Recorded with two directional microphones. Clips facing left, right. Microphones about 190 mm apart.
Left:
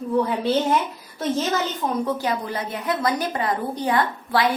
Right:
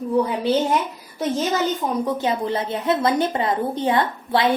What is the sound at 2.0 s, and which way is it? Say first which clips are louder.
A woman's voice: right 2 dB; 25° right (ahead or behind).